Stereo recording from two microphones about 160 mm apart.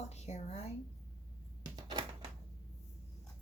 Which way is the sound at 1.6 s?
30° right (ahead or behind).